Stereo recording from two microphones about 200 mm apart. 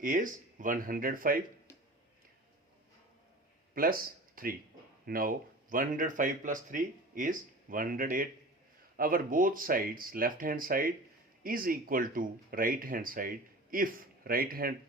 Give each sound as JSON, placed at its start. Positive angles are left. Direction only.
{"t": 0.0, "sound": "speech", "side_deg": -40}
{"t": 3.8, "sound": "speech", "side_deg": -45}